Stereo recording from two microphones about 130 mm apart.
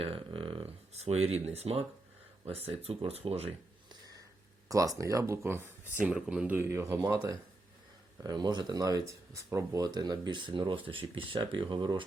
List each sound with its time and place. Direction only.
0.0 s speech: 40° right (ahead or behind)
4.7 s speech: 25° right (ahead or behind)